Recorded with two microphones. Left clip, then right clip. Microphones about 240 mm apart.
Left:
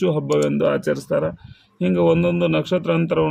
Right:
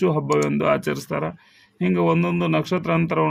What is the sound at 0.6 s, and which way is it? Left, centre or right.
Speech, centre.